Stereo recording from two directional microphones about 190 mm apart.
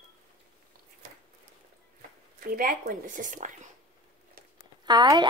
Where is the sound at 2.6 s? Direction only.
50° right (ahead or behind).